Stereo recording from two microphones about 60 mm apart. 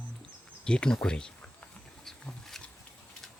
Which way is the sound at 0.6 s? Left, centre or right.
Centre.